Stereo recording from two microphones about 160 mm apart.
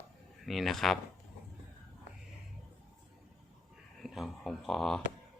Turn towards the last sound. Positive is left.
turn(degrees=0)  # may be behind; listen again after turning